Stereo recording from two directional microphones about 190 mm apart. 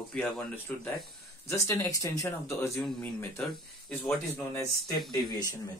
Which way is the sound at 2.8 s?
5° left (ahead or behind).